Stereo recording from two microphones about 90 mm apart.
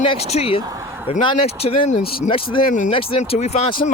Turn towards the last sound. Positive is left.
turn(degrees=90)